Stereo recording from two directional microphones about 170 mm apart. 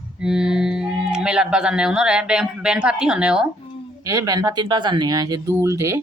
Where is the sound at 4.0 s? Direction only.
20° right (ahead or behind).